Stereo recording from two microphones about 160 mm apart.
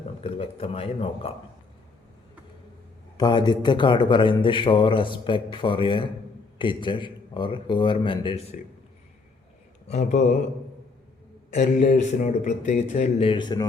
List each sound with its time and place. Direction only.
0.2 s a man's voice: 35° left (ahead or behind)
3.2 s a man's voice: 25° left (ahead or behind)
9.9 s speech: 45° left (ahead or behind)
11.5 s speech: 50° left (ahead or behind); by 13.7 s 25° left (ahead or behind)